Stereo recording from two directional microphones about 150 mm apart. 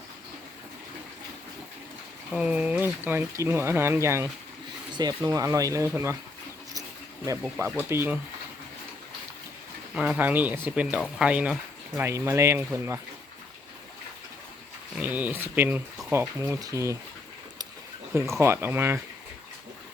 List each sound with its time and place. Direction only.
2.3 s speech: 10° right (ahead or behind)
7.6 s speech: 15° right (ahead or behind)
9.9 s speech: 5° right (ahead or behind)
14.9 s speech: 10° right (ahead or behind)
18.1 s speech: 15° right (ahead or behind)